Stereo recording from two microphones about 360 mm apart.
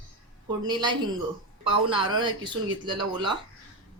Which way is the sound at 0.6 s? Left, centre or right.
Centre.